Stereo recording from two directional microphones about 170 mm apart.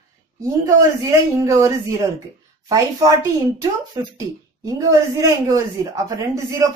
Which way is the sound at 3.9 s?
20° right (ahead or behind).